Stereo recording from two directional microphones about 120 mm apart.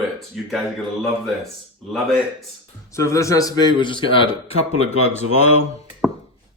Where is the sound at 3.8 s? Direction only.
45° left (ahead or behind).